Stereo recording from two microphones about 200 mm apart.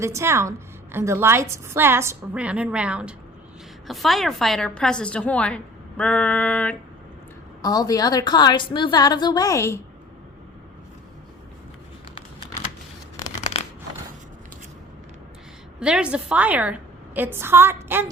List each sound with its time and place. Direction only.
0.0 s a woman's voice: 15° right (ahead or behind); by 6.7 s 5° left (ahead or behind)
7.6 s a woman's voice: 20° left (ahead or behind)
15.8 s a woman's voice: 5° right (ahead or behind)